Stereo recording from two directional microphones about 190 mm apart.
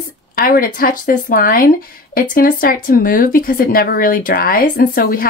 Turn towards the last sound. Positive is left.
turn(degrees=50)  # may be behind; listen again after turning